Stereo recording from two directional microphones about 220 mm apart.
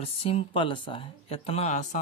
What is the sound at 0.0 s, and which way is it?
Speech, 25° left (ahead or behind).